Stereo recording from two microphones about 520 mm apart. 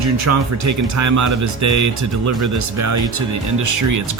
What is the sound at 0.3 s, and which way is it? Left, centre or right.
Speech, right.